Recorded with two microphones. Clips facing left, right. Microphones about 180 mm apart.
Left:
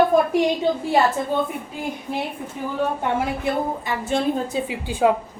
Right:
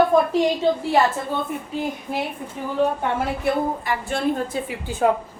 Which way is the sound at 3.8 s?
20° left (ahead or behind).